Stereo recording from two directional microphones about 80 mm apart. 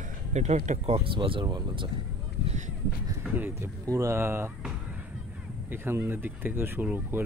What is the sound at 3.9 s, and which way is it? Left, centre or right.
Speech, right.